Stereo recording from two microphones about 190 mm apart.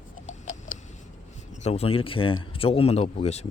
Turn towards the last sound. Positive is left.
turn(degrees=35)  # may be behind; listen again after turning